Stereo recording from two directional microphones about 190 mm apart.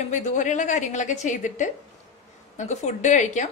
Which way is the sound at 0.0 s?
40° left (ahead or behind).